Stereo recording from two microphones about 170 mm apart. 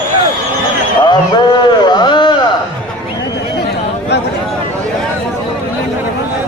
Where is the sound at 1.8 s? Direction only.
25° left (ahead or behind).